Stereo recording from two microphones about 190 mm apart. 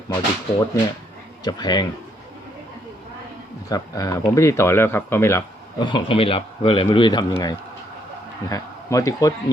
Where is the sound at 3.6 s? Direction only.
20° left (ahead or behind).